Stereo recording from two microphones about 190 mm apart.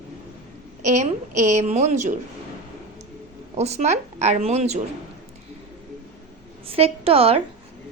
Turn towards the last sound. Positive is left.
turn(degrees=-30)  # may be behind; listen again after turning